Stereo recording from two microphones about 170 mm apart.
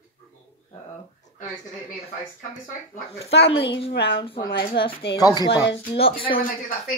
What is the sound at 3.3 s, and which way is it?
Speech, 35° left (ahead or behind).